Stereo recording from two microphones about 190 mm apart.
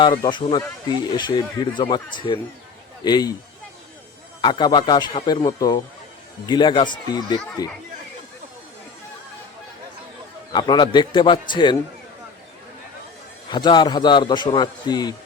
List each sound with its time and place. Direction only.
0.0 s a man's voice: 25° left (ahead or behind)
4.4 s a man's voice: 25° left (ahead or behind)
10.5 s a man's voice: 25° left (ahead or behind)
13.5 s a man's voice: 25° left (ahead or behind)